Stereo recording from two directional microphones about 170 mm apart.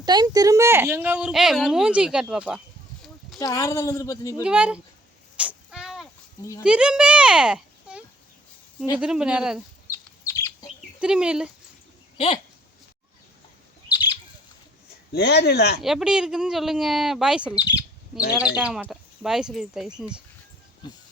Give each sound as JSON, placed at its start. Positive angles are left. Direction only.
{"t": 0.0, "sound": "a woman's voice", "side_deg": -25}
{"t": 3.3, "sound": "a woman's voice", "side_deg": 20}
{"t": 4.4, "sound": "a woman's voice", "side_deg": -5}
{"t": 5.4, "sound": "whip", "side_deg": -5}
{"t": 6.6, "sound": "a child's voice", "side_deg": -5}
{"t": 9.9, "sound": "chicken", "side_deg": 15}
{"t": 10.8, "sound": "speech", "side_deg": -5}
{"t": 12.1, "sound": "speech", "side_deg": 35}
{"t": 13.9, "sound": "bird", "side_deg": 25}
{"t": 15.1, "sound": "speech", "side_deg": 80}
{"t": 15.8, "sound": "speech", "side_deg": 0}
{"t": 17.6, "sound": "a woman's voice", "side_deg": 25}
{"t": 18.1, "sound": "speech", "side_deg": -5}
{"t": 20.8, "sound": "a woman's voice", "side_deg": 25}